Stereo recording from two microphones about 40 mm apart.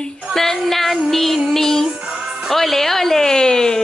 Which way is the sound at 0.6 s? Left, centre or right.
Centre.